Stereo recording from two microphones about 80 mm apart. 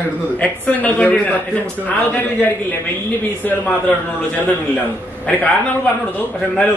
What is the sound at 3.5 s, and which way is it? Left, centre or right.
A man's voice, centre.